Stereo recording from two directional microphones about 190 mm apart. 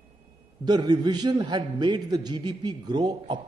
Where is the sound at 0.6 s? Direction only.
20° right (ahead or behind).